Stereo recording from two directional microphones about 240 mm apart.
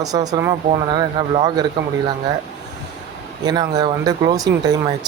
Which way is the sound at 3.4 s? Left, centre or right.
Centre.